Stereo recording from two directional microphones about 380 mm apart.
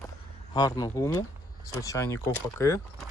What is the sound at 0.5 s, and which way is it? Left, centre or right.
Speech, centre.